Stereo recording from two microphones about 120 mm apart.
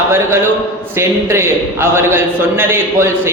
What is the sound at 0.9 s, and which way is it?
A man's voice, 20° right (ahead or behind).